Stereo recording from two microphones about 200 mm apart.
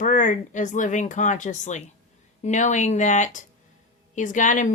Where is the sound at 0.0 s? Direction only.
40° left (ahead or behind).